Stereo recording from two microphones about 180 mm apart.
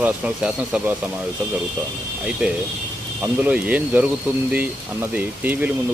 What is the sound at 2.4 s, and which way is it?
Speech, 5° right (ahead or behind).